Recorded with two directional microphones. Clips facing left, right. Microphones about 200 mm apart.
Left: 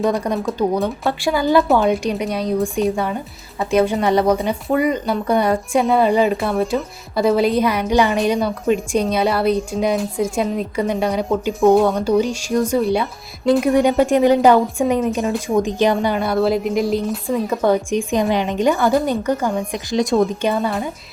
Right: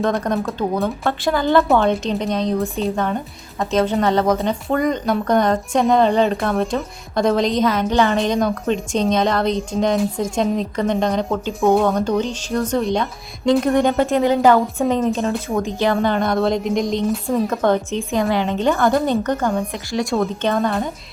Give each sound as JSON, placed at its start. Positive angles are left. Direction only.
{"t": 0.1, "sound": "a woman's voice", "side_deg": 10}
{"t": 16.0, "sound": "a woman's voice", "side_deg": 5}
{"t": 19.7, "sound": "a woman's voice", "side_deg": 20}